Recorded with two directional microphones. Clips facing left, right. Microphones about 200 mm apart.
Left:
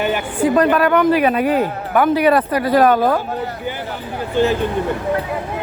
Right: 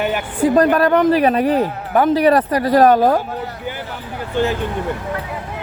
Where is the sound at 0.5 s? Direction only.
40° right (ahead or behind).